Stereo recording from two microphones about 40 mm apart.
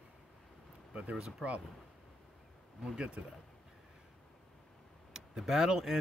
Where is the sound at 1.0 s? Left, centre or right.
Right.